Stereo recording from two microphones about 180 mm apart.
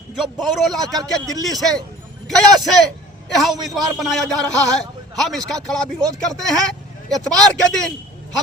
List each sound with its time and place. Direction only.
0.2 s a man's voice: centre (ahead or behind)
0.9 s a man's voice: 20° right (ahead or behind)
1.5 s a man's voice: centre (ahead or behind)